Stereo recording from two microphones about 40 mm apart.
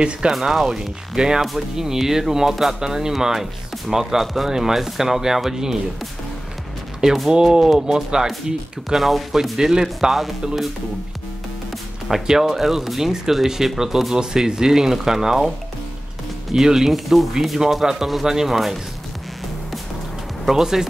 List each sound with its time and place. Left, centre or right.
0.3 s speech: centre
0.7 s speech: centre
4.2 s speech: centre
4.5 s speech: centre
7.2 s speech: centre
8.9 s speech: centre
10.0 s speech: centre
12.1 s speech: centre
16.5 s speech: centre
20.4 s speech: centre